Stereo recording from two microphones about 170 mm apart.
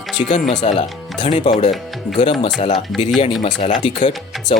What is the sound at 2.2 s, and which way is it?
Speech, 30° left (ahead or behind).